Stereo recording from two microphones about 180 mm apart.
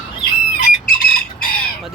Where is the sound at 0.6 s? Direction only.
50° left (ahead or behind).